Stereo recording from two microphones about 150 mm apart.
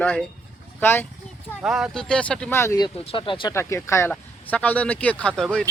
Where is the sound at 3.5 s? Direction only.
20° left (ahead or behind).